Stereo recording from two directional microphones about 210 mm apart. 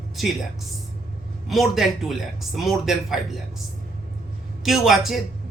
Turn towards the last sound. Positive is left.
turn(degrees=0)  # may be behind; listen again after turning